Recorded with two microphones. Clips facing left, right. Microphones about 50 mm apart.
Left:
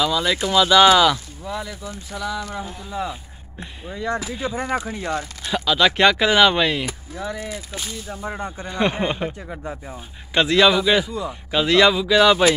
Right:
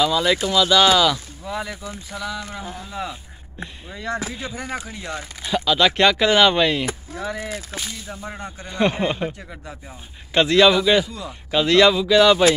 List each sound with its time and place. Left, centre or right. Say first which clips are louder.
0.0 s a man's voice: right 2 dB; centre
0.5 s a man's voice: left 4 dB; centre
3.6 s a man's voice: left 3 dB; centre
4.6 s speech: left 5 dB; centre
5.5 s a man's voice: even; centre
8.2 s speech: left 4 dB; centre
10.3 s a man's voice: right 1 dB; centre